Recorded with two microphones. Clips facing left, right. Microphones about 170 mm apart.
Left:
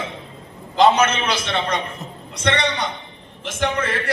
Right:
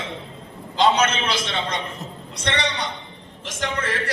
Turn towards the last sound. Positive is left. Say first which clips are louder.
# left 4 dB
turn(degrees=60)  # may be behind; listen again after turning